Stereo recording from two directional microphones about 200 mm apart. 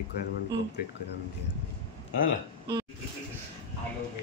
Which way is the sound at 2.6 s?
20° right (ahead or behind).